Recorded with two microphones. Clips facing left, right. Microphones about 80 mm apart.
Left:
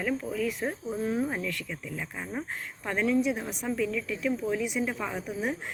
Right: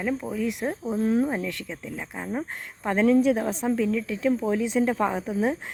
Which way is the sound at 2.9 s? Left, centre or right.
Right.